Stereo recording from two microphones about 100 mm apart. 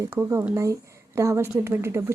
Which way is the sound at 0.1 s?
20° right (ahead or behind).